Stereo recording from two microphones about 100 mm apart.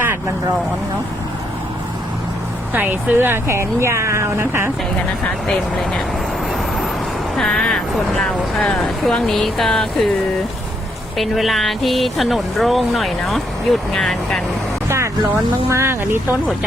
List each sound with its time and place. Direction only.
2.7 s speech: 20° right (ahead or behind)
5.2 s speech: 5° left (ahead or behind)
7.3 s speech: 5° left (ahead or behind)
11.2 s speech: centre (ahead or behind)
14.8 s vehicle: 30° right (ahead or behind)
15.7 s speech: 30° right (ahead or behind)